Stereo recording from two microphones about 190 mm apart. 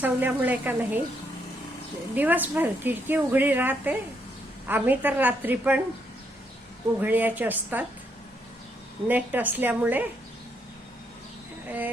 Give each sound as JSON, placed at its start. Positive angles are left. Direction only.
{"t": 0.0, "sound": "a woman's voice", "side_deg": -10}
{"t": 2.1, "sound": "a woman's voice", "side_deg": -10}
{"t": 7.0, "sound": "a woman's voice", "side_deg": -10}
{"t": 9.0, "sound": "a woman's voice", "side_deg": -10}